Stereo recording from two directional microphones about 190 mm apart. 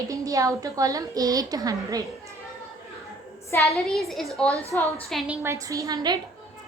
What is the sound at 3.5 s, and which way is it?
A woman's voice, 10° left (ahead or behind).